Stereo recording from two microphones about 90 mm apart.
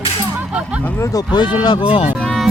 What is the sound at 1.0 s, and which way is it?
Speech, 40° left (ahead or behind).